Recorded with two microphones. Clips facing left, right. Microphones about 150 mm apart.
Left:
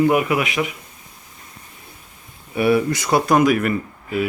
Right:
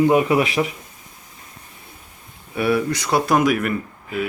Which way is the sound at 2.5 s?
Centre (ahead or behind).